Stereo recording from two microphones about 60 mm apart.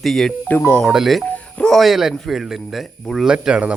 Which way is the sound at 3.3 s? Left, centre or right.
Centre.